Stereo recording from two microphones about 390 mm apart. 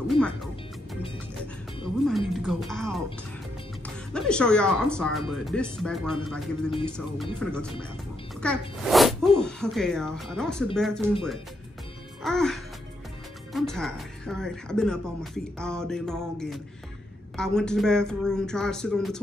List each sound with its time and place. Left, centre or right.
2.0 s speech: centre
4.1 s speech: centre
8.4 s speech: centre
12.2 s speech: centre